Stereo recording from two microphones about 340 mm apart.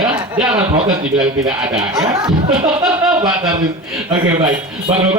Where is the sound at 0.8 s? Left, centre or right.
Centre.